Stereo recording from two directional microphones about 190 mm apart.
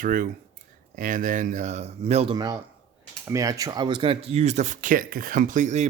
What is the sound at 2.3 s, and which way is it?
A man's voice, 20° right (ahead or behind).